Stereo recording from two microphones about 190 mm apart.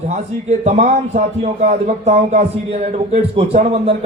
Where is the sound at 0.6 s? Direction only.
35° right (ahead or behind).